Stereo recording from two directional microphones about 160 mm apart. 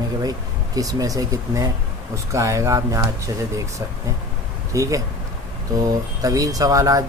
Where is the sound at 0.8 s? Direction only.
20° right (ahead or behind).